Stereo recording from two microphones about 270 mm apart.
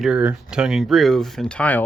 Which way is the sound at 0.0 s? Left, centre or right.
Centre.